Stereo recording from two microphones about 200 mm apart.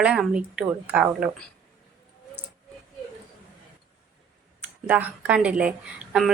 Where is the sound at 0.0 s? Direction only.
5° right (ahead or behind).